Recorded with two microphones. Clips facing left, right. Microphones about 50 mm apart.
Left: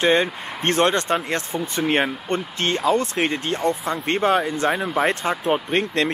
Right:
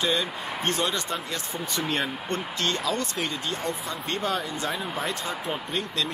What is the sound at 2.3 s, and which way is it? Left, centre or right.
Speech, left.